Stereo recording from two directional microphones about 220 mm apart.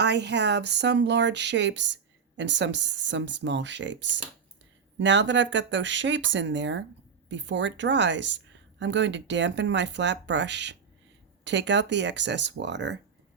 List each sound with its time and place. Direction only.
0.0 s a woman's voice: 50° right (ahead or behind)